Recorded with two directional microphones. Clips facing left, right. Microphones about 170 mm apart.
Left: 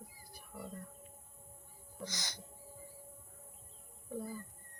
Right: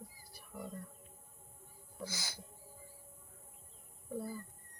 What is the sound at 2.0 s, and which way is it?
Speech, 5° right (ahead or behind).